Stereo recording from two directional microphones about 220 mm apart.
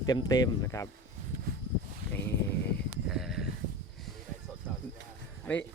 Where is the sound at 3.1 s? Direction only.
Centre (ahead or behind).